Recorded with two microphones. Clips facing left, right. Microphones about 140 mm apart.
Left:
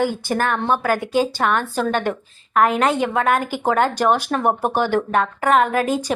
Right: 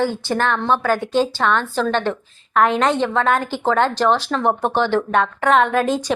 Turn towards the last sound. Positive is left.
turn(degrees=10)  # may be behind; listen again after turning